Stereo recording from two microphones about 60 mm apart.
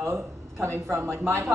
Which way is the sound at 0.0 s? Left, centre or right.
Right.